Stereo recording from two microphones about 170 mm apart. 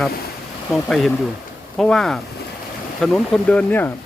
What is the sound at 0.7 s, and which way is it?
Speech, centre (ahead or behind).